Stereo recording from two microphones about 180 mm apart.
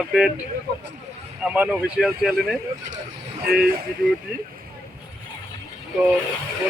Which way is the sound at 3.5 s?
55° right (ahead or behind).